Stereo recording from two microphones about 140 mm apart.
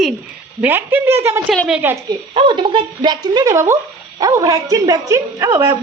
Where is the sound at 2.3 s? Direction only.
35° right (ahead or behind).